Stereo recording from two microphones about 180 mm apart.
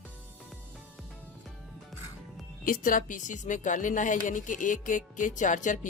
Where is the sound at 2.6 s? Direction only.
50° left (ahead or behind).